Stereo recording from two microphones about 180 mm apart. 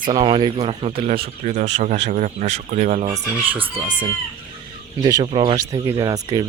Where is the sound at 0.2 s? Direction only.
25° right (ahead or behind).